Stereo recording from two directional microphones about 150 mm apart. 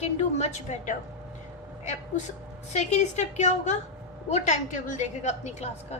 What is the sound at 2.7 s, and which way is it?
A woman's voice, 50° left (ahead or behind).